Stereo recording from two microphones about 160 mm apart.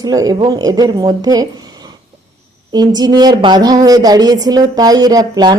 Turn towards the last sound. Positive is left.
turn(degrees=-25)  # may be behind; listen again after turning